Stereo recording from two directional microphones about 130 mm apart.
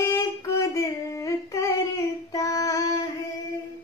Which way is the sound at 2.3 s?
25° left (ahead or behind).